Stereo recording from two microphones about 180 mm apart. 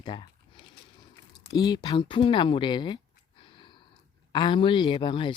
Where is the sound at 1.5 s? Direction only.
20° left (ahead or behind).